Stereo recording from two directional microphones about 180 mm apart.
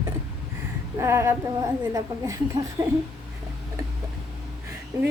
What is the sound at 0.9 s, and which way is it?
A woman's voice, 15° right (ahead or behind).